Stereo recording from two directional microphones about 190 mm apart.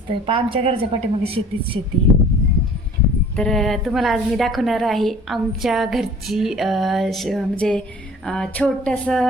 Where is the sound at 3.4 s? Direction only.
Centre (ahead or behind).